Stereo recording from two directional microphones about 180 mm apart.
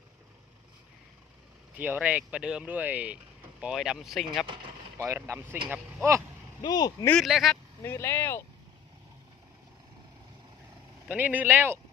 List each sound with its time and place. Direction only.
1.7 s speech: 10° right (ahead or behind)
4.4 s speech: 25° right (ahead or behind)
4.9 s speech: 15° right (ahead or behind)
6.6 s speech: 20° left (ahead or behind)
7.1 s speech: centre (ahead or behind)
7.8 s speech: 15° left (ahead or behind)
11.1 s speech: 10° right (ahead or behind)